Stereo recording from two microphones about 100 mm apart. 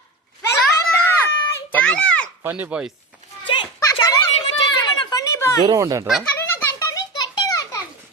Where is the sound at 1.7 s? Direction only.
10° left (ahead or behind).